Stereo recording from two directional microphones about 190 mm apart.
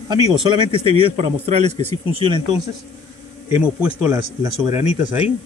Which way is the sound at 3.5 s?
5° right (ahead or behind).